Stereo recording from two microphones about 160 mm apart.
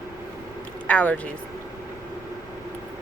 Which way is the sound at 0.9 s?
10° left (ahead or behind).